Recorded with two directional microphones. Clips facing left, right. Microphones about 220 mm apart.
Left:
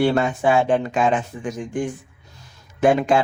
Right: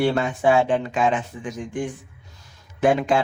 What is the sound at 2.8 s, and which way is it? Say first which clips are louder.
Speech: left 2 dB; 45° left (ahead or behind).